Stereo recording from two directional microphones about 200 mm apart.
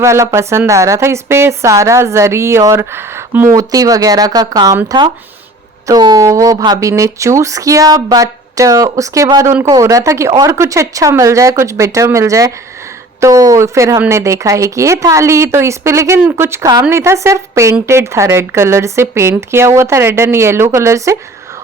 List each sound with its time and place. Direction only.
0.0 s speech: 15° right (ahead or behind)